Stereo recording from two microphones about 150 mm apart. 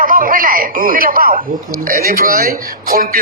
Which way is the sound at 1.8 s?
80° right.